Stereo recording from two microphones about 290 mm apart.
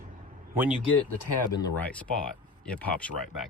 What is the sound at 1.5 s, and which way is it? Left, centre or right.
Speech, centre.